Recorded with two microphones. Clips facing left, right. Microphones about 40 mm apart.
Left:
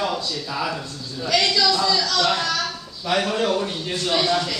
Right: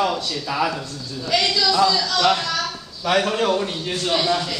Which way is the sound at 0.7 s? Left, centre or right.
Centre.